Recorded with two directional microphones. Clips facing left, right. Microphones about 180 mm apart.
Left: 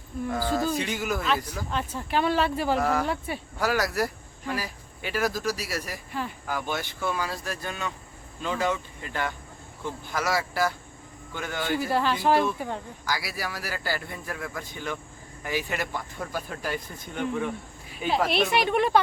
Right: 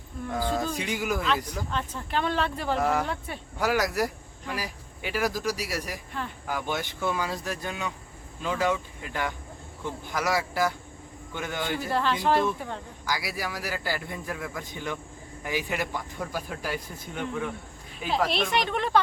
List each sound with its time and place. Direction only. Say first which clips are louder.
0.3 s speech: left 2 dB; 5° left (ahead or behind)
0.8 s speech: even; 10° right (ahead or behind)
1.7 s speech: left 3 dB; 5° left (ahead or behind)
2.8 s a man's voice: even; 20° right (ahead or behind)
3.1 s speech: left 4 dB; 5° left (ahead or behind)
3.6 s speech: right 1 dB; 15° right (ahead or behind)
6.1 s speech: left 3 dB; 5° left (ahead or behind)
6.5 s a man's voice: right 2 dB; 15° right (ahead or behind)
11.8 s speech: left 1 dB; 5° left (ahead or behind)
13.1 s speech: even; 15° right (ahead or behind); by 18.9 s 10° left (ahead or behind)